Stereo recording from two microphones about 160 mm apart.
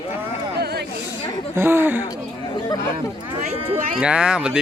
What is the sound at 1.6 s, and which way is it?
Speech, 15° right (ahead or behind).